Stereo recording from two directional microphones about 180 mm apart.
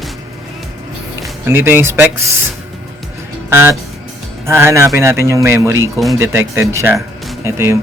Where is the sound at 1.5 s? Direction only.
10° right (ahead or behind).